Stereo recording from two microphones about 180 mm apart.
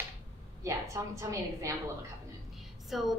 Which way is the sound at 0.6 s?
15° right (ahead or behind).